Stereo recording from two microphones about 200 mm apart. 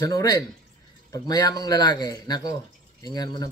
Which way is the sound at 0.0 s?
15° left (ahead or behind).